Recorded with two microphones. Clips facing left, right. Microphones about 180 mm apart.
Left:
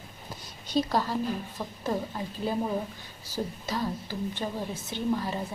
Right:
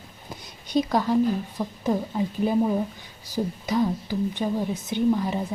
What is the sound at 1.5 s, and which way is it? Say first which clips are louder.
A woman's voice: right 5 dB; 15° right (ahead or behind).